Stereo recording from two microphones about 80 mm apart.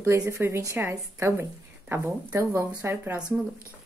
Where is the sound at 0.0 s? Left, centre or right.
Right.